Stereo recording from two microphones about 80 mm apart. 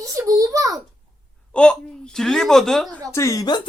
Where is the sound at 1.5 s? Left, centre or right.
Centre.